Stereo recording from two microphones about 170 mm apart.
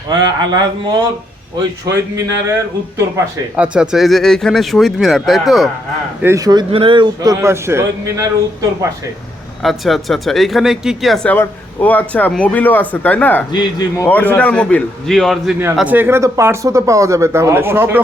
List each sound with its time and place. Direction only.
0.1 s a man's voice: 25° right (ahead or behind)
3.5 s speech: 5° right (ahead or behind)
6.2 s a man's voice: 20° right (ahead or behind)
9.6 s speech: centre (ahead or behind)
13.5 s speech: 25° left (ahead or behind); by 18.0 s 15° right (ahead or behind)